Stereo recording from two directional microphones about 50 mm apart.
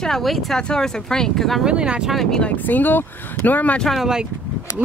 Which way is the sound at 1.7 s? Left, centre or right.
Centre.